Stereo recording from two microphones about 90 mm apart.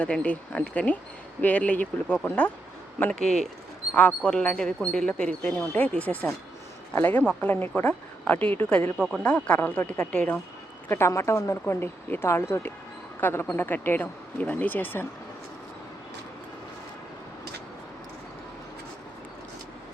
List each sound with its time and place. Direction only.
0.0 s speech: 15° left (ahead or behind)
3.1 s speech: 5° left (ahead or behind)
10.8 s a woman's voice: 30° left (ahead or behind)